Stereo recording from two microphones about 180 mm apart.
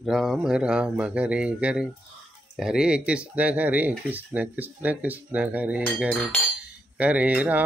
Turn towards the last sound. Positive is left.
turn(degrees=-10)  # may be behind; listen again after turning